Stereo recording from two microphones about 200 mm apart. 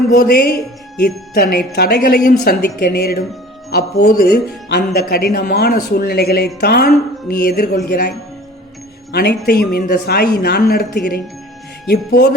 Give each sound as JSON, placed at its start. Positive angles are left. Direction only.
{"t": 0.1, "sound": "speech", "side_deg": 50}
{"t": 9.1, "sound": "speech", "side_deg": 50}